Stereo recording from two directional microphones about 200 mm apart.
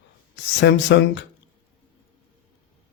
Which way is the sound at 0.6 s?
65° left (ahead or behind).